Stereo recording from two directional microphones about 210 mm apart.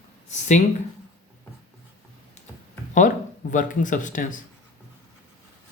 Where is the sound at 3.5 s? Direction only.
40° left (ahead or behind).